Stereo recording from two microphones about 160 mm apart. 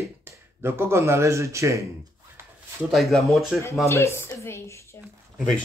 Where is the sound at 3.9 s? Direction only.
15° left (ahead or behind).